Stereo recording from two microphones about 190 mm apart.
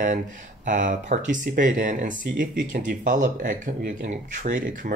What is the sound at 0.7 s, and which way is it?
Speech, 40° right (ahead or behind).